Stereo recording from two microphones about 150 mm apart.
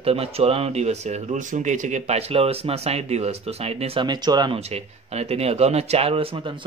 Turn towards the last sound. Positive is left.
turn(degrees=-35)  # may be behind; listen again after turning